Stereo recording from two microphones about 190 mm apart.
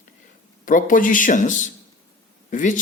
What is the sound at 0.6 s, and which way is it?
Speech, 45° left (ahead or behind).